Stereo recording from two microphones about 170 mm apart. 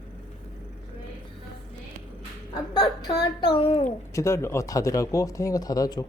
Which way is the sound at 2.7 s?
25° left (ahead or behind).